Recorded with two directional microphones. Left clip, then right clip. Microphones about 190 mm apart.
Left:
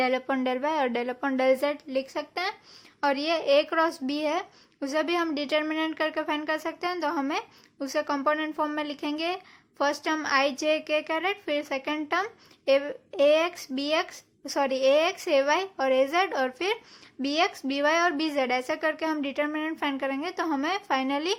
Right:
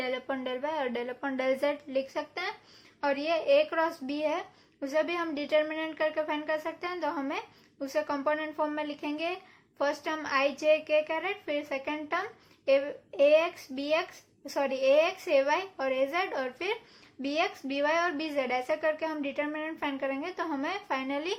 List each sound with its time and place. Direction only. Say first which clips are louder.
0.0 s speech: left 7 dB; 45° left (ahead or behind)